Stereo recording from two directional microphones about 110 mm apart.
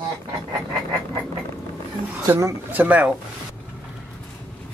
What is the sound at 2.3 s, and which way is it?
Speech, 30° right (ahead or behind).